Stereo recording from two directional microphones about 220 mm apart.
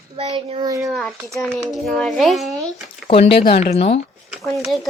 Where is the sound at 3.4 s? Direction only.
25° left (ahead or behind).